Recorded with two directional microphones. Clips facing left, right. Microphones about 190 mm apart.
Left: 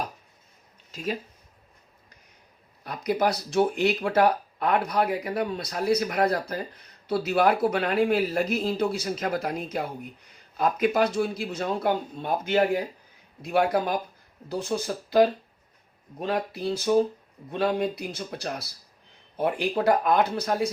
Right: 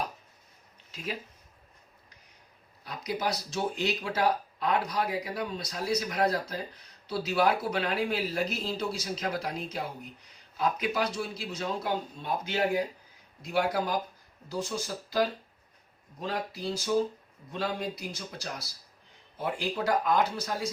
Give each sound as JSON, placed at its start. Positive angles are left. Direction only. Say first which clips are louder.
{"t": 2.8, "sound": "speech", "louder": "left 7 dB", "side_deg": 55}